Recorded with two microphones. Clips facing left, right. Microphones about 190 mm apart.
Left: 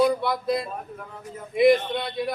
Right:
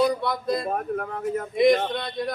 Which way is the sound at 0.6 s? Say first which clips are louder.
Right 9 dB; 65° right (ahead or behind).